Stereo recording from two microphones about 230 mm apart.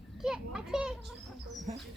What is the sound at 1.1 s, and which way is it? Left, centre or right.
Speech, centre.